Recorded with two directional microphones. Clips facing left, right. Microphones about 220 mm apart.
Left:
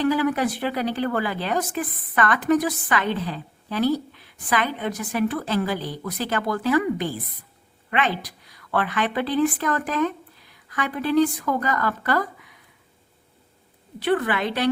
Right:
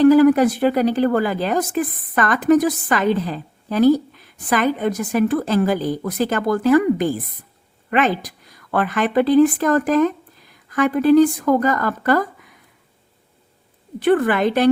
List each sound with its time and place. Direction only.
0.0 s a woman's voice: 45° right (ahead or behind)
14.0 s a woman's voice: 45° right (ahead or behind)